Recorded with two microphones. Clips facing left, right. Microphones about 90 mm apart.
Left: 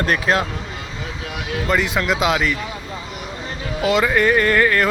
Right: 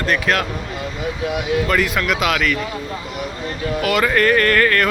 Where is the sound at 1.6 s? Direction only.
20° left (ahead or behind).